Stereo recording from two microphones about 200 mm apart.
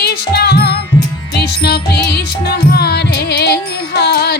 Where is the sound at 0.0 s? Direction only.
55° left (ahead or behind).